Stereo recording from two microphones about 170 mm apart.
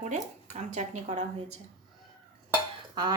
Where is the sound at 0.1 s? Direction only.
45° right (ahead or behind).